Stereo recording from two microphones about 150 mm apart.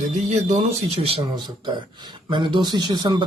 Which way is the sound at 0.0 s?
50° right (ahead or behind).